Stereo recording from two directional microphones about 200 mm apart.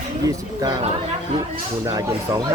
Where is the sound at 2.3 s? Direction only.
20° right (ahead or behind).